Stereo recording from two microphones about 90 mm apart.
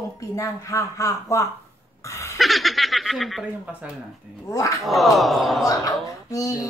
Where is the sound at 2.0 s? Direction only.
35° left (ahead or behind).